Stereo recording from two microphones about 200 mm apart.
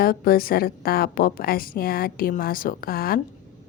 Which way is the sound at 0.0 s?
50° left (ahead or behind).